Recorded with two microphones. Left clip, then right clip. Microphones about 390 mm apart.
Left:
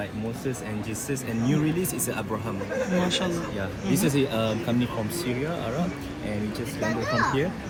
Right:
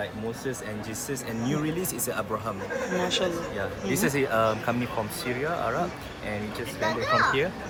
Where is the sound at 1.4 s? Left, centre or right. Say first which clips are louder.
Left 3 dB; right.